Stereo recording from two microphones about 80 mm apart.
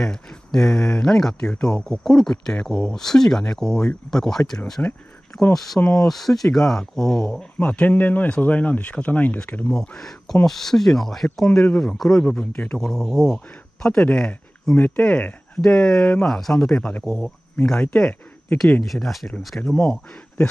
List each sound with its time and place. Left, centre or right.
0.0 s speech: centre
4.8 s speech: centre
5.4 s a man's voice: centre
9.7 s a man's voice: centre
18.9 s a man's voice: centre